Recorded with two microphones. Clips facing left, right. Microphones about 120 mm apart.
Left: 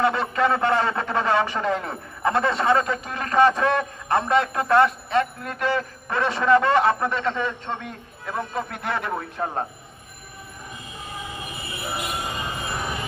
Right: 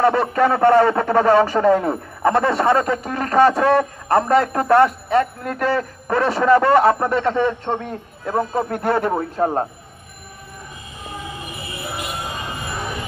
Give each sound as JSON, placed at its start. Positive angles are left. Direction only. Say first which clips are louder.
{"t": 0.0, "sound": "a man's voice", "louder": "right 5 dB", "side_deg": -40}